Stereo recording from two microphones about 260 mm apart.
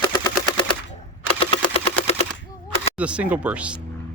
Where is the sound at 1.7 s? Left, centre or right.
Left.